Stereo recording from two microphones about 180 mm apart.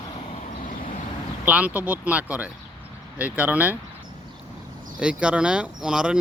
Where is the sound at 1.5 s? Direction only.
10° right (ahead or behind).